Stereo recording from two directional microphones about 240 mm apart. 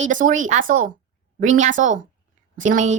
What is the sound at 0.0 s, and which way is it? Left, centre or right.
Speech, right.